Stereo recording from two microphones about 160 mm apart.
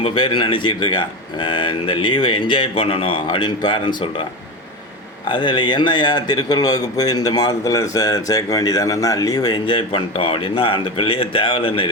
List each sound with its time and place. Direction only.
0.0 s speech: 30° left (ahead or behind)
5.3 s a man's voice: 30° left (ahead or behind)